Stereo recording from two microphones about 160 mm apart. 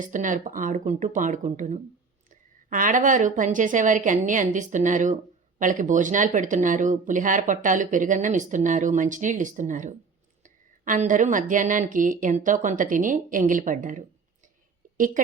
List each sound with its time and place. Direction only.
0.0 s a woman's voice: 55° right (ahead or behind)